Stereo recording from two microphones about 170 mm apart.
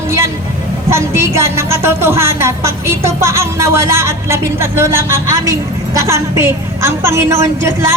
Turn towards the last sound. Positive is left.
turn(degrees=-15)  # may be behind; listen again after turning